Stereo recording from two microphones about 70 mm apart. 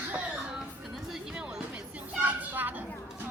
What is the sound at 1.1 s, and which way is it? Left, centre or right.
Music, centre.